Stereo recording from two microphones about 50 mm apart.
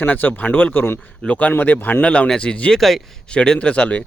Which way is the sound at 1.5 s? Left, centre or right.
Left.